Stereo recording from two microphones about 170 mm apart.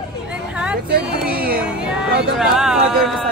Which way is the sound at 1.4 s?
60° right (ahead or behind).